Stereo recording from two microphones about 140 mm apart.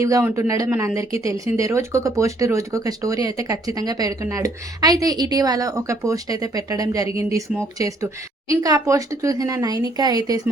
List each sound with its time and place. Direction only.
0.0 s speech: 20° right (ahead or behind)